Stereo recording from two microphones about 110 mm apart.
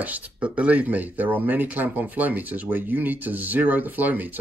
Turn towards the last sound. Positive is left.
turn(degrees=-15)  # may be behind; listen again after turning